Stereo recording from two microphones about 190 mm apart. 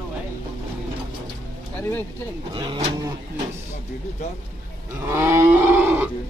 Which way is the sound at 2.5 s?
25° right (ahead or behind).